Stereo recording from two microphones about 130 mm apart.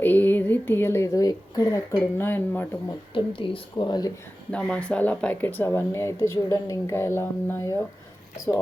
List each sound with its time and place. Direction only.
0.0 s speech: 15° left (ahead or behind)
3.2 s a woman's voice: 40° left (ahead or behind)
4.5 s speech: 10° left (ahead or behind)